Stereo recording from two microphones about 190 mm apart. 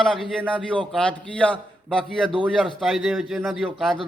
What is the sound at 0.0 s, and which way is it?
A man's voice, centre (ahead or behind).